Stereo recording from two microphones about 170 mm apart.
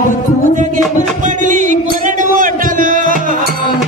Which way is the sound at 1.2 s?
50° right (ahead or behind).